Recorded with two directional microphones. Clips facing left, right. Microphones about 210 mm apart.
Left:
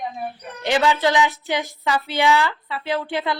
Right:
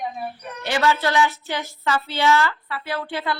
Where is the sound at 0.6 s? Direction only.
15° left (ahead or behind).